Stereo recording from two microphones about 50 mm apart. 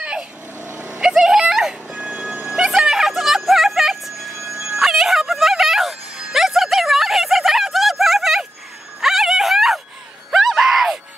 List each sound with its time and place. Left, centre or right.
0.0 s vehicle: centre
0.7 s vehicle: right
1.0 s vehicle: centre
1.9 s music: centre
2.6 s a sound: centre
4.8 s music: centre
9.0 s a sound: centre